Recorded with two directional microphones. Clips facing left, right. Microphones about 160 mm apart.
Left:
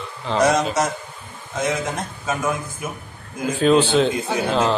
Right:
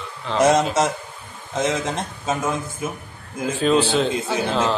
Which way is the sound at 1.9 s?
25° right (ahead or behind).